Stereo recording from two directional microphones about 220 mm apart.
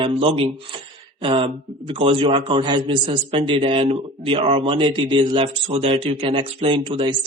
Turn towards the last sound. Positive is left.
turn(degrees=-20)  # may be behind; listen again after turning